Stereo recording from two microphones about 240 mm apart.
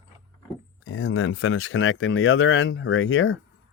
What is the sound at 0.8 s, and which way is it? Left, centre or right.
Speech, left.